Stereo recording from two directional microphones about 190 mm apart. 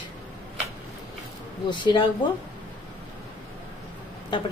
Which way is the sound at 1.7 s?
25° left (ahead or behind).